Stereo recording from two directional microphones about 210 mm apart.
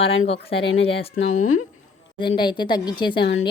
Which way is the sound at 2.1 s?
20° left (ahead or behind).